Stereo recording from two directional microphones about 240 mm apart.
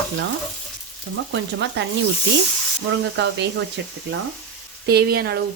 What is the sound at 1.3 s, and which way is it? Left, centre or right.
Speech, right.